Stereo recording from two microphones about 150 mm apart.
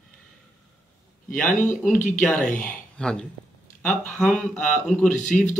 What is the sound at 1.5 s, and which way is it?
Speech, 55° left (ahead or behind).